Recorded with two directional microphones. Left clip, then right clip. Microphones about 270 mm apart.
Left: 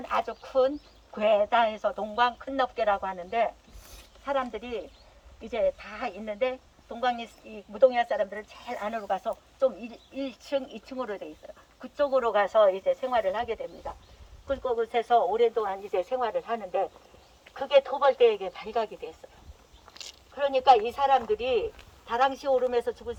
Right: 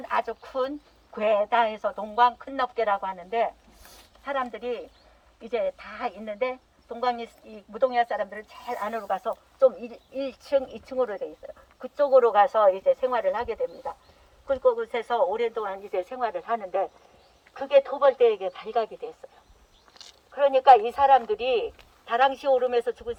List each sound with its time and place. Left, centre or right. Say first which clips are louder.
0.1 s a woman's voice: even; centre
19.9 s a sound: left 4 dB; left
20.3 s a woman's voice: right 4 dB; centre